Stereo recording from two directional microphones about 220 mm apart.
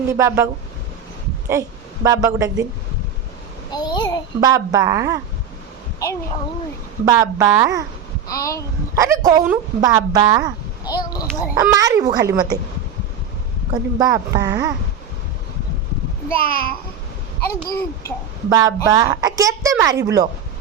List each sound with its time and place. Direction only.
0.1 s speech: 15° right (ahead or behind)
2.0 s speech: 15° right (ahead or behind)
3.7 s a sound: 20° left (ahead or behind)
4.4 s speech: 15° right (ahead or behind)
7.0 s speech: 15° right (ahead or behind)
8.3 s a child's voice: 15° left (ahead or behind)
9.0 s speech: 15° right (ahead or behind)
10.8 s a child's voice: 15° left (ahead or behind)
11.6 s speech: 15° right (ahead or behind)
14.0 s speech: 15° right (ahead or behind)
16.3 s a child's voice: 40° left (ahead or behind)
17.4 s a child's voice: 15° left (ahead or behind)
18.4 s speech: 15° right (ahead or behind)